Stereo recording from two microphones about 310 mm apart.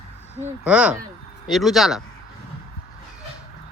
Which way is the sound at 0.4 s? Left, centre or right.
Centre.